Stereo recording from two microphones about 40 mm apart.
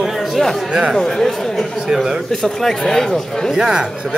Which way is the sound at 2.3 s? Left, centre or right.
Centre.